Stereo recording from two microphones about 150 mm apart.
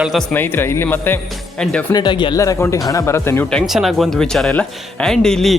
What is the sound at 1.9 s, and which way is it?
Speech, 30° left (ahead or behind).